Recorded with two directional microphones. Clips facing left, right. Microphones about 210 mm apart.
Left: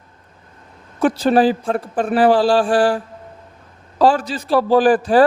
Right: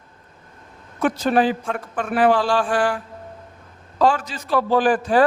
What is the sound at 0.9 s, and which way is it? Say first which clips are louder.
A man's voice: left 4 dB; 30° left (ahead or behind).